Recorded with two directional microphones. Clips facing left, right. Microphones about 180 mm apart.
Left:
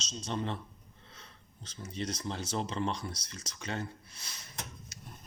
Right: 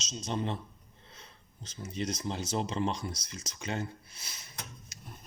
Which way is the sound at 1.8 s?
15° right (ahead or behind).